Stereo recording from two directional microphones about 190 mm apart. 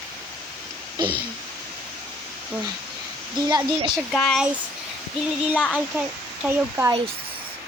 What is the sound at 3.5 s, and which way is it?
Speech, 20° right (ahead or behind).